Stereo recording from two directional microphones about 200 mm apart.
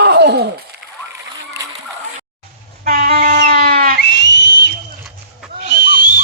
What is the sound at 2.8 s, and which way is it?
Train, 45° right (ahead or behind).